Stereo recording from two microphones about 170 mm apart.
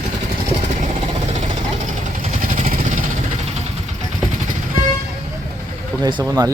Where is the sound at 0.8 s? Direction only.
45° right (ahead or behind).